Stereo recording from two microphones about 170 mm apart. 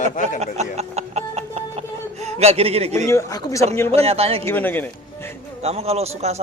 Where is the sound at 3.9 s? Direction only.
35° right (ahead or behind).